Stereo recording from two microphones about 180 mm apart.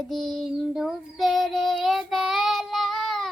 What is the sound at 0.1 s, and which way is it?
Child singing, centre (ahead or behind).